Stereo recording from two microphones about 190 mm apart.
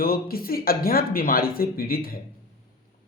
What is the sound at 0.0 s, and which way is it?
Speech, 50° left (ahead or behind).